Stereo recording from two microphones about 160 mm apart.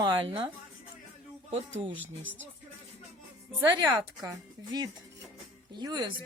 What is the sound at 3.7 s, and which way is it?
Speech, 25° right (ahead or behind).